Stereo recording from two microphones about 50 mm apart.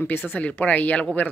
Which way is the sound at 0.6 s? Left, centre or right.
Left.